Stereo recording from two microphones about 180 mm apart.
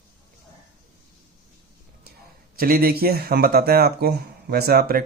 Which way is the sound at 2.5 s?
55° right (ahead or behind).